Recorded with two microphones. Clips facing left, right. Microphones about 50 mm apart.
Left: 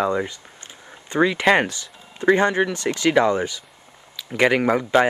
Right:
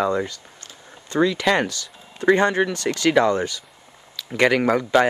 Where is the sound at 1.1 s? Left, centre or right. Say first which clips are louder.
Left 2 dB; left.